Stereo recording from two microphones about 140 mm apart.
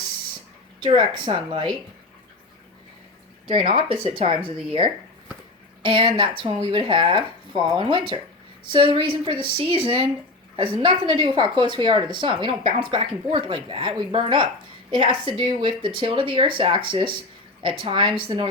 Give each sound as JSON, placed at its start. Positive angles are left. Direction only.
{"t": 0.8, "sound": "speech", "side_deg": -35}
{"t": 3.5, "sound": "speech", "side_deg": -50}